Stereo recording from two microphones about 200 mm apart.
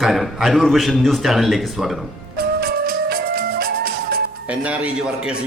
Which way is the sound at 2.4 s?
50° right (ahead or behind).